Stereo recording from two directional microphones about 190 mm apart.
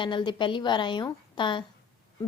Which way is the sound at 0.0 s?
25° left (ahead or behind).